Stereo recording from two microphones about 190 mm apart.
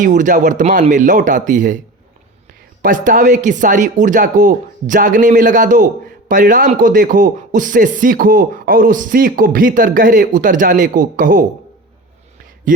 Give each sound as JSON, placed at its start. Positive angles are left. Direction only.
{"t": 0.0, "sound": "speech", "side_deg": -45}
{"t": 2.8, "sound": "speech", "side_deg": -45}
{"t": 12.7, "sound": "speech", "side_deg": -45}